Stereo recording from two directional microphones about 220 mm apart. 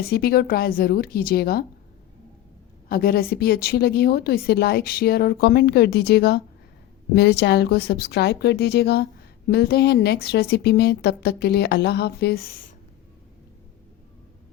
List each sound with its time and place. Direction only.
0.1 s a woman's voice: 45° left (ahead or behind)
2.9 s a woman's voice: 45° left (ahead or behind)